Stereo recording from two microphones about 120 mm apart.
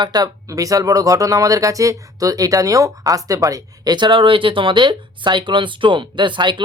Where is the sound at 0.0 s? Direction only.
35° right (ahead or behind).